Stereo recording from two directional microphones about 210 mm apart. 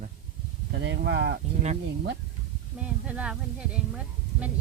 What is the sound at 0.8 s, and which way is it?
Speech, 60° right (ahead or behind).